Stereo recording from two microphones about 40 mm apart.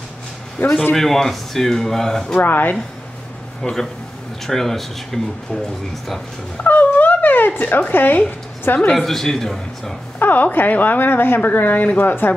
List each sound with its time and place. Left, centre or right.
0.6 s speech: left
0.9 s speech: centre
2.3 s speech: left
3.6 s speech: centre
6.6 s dog: left
7.9 s speech: left
8.9 s speech: centre
10.1 s speech: left
12.0 s speech: left